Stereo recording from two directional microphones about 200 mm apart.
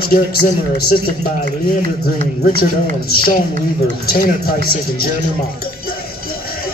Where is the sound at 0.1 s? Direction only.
50° left (ahead or behind).